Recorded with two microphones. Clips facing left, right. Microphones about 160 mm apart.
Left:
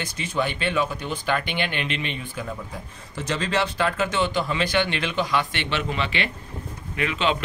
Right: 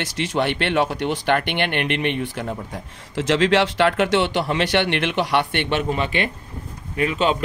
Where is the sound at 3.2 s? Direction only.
90° right.